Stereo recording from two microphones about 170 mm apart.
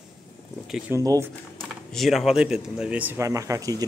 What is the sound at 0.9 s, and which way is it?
Speech, 20° right (ahead or behind).